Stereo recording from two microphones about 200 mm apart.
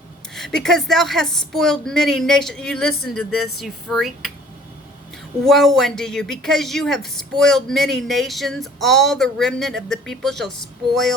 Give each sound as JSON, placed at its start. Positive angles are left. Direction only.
{"t": 0.3, "sound": "speech", "side_deg": 0}
{"t": 5.5, "sound": "speech", "side_deg": 0}